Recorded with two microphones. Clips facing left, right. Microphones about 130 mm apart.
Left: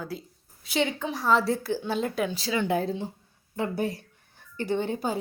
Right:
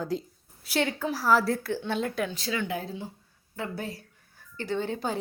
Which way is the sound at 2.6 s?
30° left (ahead or behind).